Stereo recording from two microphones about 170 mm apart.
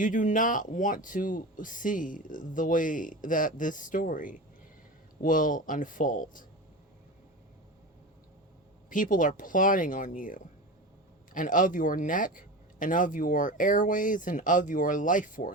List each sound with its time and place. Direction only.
0.0 s speech: 50° left (ahead or behind)
8.9 s speech: 50° left (ahead or behind)